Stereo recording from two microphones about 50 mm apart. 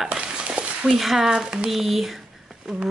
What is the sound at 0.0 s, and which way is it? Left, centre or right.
Dog, centre.